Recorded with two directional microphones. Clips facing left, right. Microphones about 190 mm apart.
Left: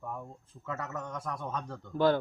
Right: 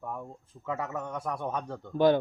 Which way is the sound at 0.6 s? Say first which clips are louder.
Right 4 dB; 15° right (ahead or behind).